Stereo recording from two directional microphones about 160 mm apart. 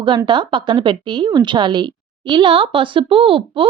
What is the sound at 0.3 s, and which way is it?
A woman's voice, 30° right (ahead or behind).